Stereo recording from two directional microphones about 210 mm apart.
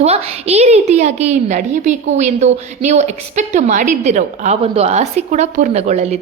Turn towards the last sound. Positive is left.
turn(degrees=-30)  # may be behind; listen again after turning